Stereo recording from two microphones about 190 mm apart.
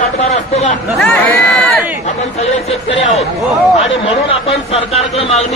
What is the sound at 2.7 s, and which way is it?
Speech, 30° left (ahead or behind).